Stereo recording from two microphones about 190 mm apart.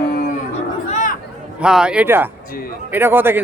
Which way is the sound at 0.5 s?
40° left (ahead or behind).